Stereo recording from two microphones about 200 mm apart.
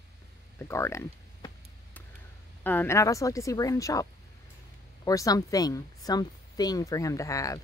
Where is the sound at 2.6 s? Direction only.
10° left (ahead or behind).